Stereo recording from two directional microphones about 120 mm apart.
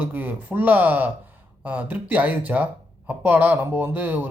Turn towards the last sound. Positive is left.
turn(degrees=-15)  # may be behind; listen again after turning